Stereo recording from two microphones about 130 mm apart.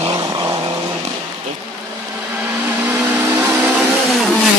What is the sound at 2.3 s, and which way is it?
Vehicle, 15° right (ahead or behind).